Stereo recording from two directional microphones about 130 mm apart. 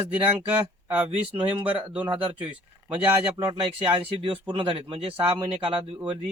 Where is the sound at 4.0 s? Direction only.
45° right (ahead or behind).